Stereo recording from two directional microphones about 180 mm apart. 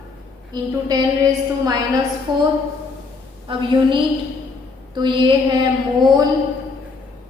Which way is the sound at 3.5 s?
25° right (ahead or behind).